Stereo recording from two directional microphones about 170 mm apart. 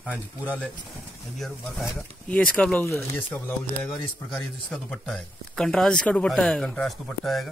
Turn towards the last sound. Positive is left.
turn(degrees=0)  # may be behind; listen again after turning